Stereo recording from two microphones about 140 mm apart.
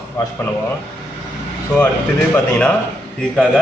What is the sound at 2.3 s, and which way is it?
Speech, 10° left (ahead or behind).